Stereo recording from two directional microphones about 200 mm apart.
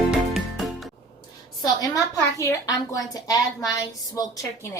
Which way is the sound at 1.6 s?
15° left (ahead or behind).